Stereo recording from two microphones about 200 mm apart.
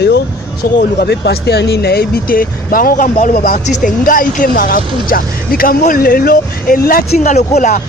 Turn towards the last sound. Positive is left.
turn(degrees=35)  # may be behind; listen again after turning